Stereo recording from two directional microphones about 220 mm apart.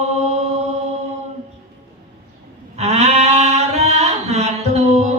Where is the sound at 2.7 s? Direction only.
30° right (ahead or behind).